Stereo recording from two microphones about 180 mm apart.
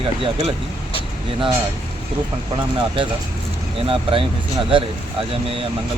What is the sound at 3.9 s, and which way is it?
Speech, 30° right (ahead or behind).